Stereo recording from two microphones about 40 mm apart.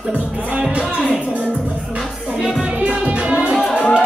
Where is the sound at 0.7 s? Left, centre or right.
Right.